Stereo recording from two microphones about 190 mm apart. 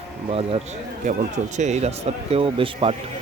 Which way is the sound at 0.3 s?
30° right (ahead or behind).